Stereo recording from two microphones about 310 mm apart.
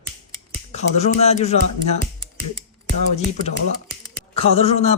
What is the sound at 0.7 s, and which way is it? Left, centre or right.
Speech, left.